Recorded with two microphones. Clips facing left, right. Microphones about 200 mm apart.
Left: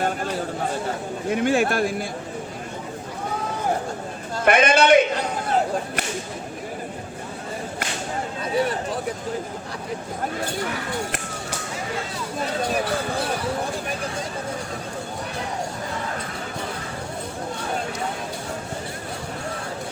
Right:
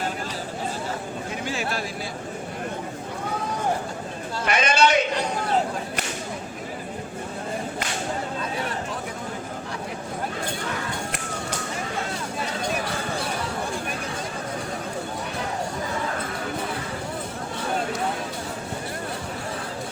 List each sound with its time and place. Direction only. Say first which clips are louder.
1.3 s a man's voice: left 10 dB; 55° left (ahead or behind)
4.4 s a man's voice: left 5 dB; 55° left (ahead or behind)